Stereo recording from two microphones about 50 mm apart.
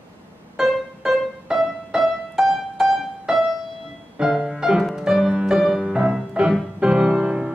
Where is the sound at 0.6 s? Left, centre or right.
Centre.